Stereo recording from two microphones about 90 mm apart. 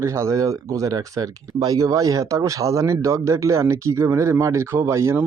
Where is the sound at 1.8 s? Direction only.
40° right (ahead or behind).